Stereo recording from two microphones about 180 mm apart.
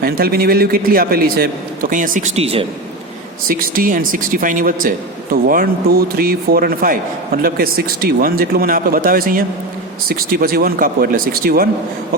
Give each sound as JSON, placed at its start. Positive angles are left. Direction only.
{"t": 0.0, "sound": "a man's voice", "side_deg": -55}
{"t": 3.4, "sound": "a man's voice", "side_deg": -50}